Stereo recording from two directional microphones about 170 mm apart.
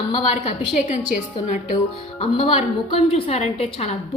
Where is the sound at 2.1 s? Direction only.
35° left (ahead or behind).